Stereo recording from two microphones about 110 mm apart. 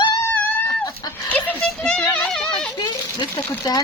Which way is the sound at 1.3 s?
10° left (ahead or behind).